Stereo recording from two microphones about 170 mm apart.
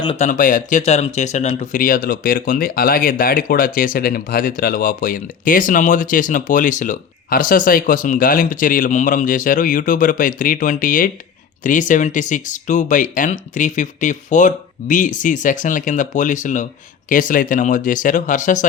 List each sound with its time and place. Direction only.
0.2 s speech: 50° left (ahead or behind)